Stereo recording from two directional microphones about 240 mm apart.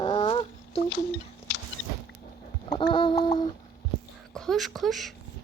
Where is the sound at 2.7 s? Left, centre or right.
Centre.